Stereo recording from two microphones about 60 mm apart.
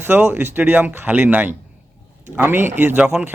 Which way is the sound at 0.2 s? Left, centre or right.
Centre.